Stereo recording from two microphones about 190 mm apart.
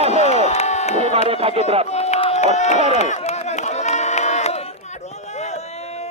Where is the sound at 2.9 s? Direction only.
35° left (ahead or behind).